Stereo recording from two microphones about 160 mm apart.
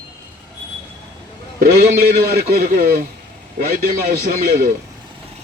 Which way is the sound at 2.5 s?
55° right (ahead or behind).